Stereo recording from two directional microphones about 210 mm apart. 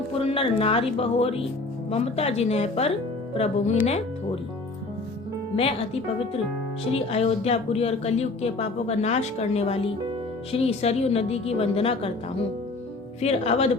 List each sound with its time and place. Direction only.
0.2 s speech: 25° left (ahead or behind)
5.5 s speech: 30° left (ahead or behind)
13.2 s speech: 30° left (ahead or behind)